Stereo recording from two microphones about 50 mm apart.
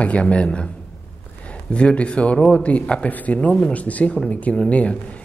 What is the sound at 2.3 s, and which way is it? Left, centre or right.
Speech, centre.